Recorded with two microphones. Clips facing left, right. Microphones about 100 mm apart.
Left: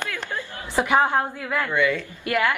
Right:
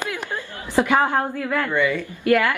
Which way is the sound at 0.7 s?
20° left (ahead or behind).